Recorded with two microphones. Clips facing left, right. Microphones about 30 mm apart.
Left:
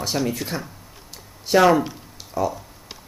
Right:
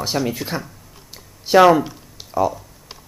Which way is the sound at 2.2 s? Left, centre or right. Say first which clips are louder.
Right 5 dB; centre.